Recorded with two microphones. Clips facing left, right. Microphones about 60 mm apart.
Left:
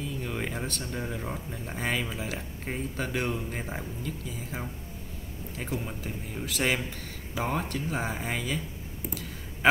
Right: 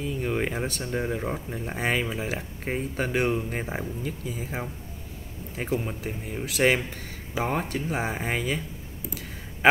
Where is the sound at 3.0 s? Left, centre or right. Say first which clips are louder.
Right 6 dB; centre.